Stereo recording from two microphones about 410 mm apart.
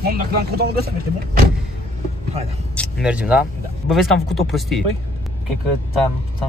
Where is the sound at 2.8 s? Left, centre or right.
Centre.